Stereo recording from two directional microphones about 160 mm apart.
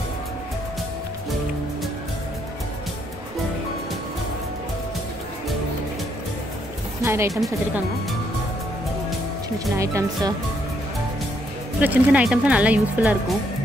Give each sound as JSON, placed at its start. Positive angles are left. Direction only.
{"t": 7.0, "sound": "music", "side_deg": -15}
{"t": 9.8, "sound": "a woman's voice", "side_deg": -20}
{"t": 11.8, "sound": "speech", "side_deg": -10}